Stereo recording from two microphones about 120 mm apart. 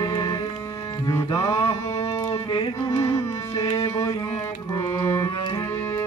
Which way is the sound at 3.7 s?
65° left (ahead or behind).